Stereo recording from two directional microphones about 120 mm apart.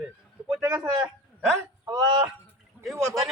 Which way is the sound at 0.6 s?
25° right (ahead or behind).